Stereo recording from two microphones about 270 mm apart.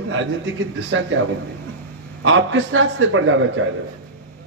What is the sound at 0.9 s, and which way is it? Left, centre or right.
A man's voice, right.